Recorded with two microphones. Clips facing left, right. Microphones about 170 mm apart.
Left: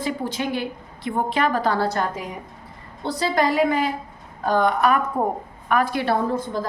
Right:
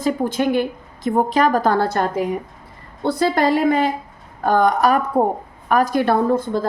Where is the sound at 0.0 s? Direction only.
50° right (ahead or behind).